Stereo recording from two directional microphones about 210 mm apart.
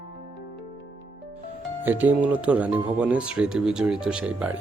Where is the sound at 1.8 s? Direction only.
10° right (ahead or behind).